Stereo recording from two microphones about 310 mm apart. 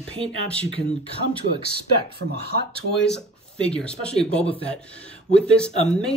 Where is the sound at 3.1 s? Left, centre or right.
Centre.